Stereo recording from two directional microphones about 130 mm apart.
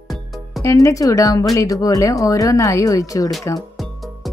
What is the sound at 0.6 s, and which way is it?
Speech, 25° left (ahead or behind).